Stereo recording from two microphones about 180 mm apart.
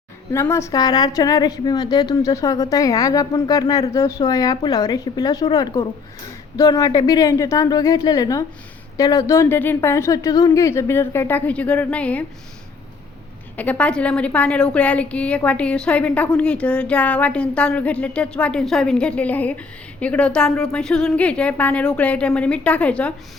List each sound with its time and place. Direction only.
0.3 s a woman's voice: 15° left (ahead or behind)
13.6 s a woman's voice: 5° left (ahead or behind)